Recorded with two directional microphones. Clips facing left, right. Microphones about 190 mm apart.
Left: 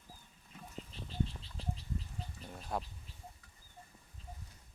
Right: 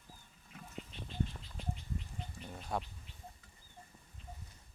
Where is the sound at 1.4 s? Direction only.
30° left (ahead or behind).